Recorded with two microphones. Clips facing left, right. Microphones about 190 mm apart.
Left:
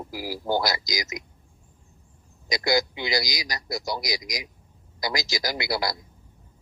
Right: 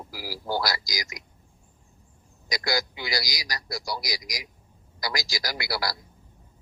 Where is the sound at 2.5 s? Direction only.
20° left (ahead or behind).